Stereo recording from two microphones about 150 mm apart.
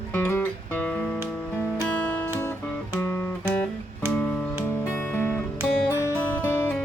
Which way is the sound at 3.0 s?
10° left (ahead or behind).